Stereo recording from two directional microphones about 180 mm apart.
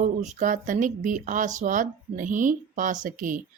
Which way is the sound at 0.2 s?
45° right (ahead or behind).